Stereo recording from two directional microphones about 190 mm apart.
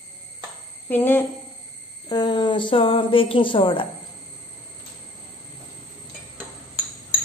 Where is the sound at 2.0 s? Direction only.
25° left (ahead or behind).